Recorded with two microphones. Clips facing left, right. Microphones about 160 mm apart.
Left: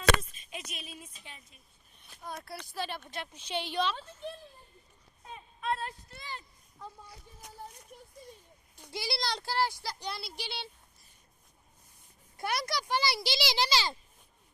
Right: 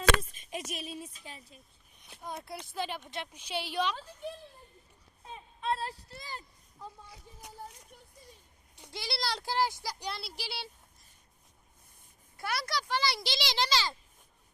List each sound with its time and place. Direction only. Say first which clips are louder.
0.7 s speech: right 6 dB; 35° right (ahead or behind)
2.0 s a woman's voice: right 1 dB; 15° right (ahead or behind)
5.2 s speech: right 1 dB; 30° right (ahead or behind)
6.7 s a woman's voice: even; 15° right (ahead or behind)
8.9 s a child's voice: left 1 dB; 5° left (ahead or behind)
9.5 s a woman's voice: right 1 dB; 20° right (ahead or behind)
10.1 s a child's voice: even; centre (ahead or behind)
12.4 s a child's voice: left 1 dB; 20° left (ahead or behind)